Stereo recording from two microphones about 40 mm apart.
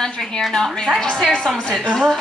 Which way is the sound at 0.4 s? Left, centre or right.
Centre.